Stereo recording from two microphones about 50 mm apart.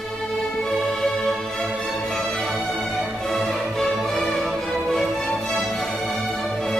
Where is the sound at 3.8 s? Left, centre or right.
Centre.